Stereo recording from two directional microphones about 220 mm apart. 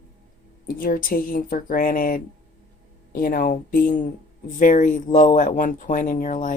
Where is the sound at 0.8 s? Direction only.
40° left (ahead or behind).